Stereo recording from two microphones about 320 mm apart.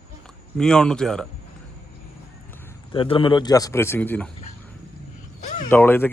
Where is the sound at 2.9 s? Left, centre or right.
Centre.